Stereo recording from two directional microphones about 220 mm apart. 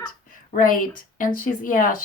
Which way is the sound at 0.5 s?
40° left (ahead or behind).